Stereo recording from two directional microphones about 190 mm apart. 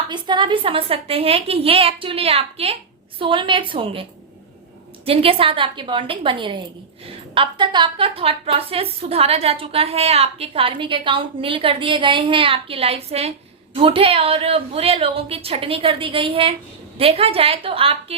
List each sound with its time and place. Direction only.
0.1 s a woman's voice: 25° right (ahead or behind)
5.0 s a woman's voice: 30° right (ahead or behind)